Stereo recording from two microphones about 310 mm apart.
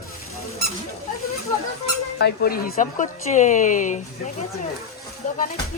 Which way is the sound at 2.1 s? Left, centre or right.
Left.